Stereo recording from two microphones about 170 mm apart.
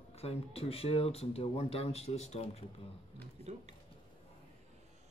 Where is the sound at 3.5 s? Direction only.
40° right (ahead or behind).